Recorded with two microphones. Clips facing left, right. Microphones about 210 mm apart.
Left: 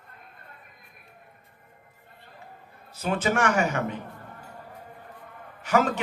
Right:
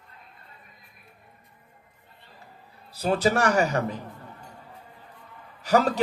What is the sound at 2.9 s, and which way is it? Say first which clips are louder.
Speech: right 3 dB; 35° right (ahead or behind).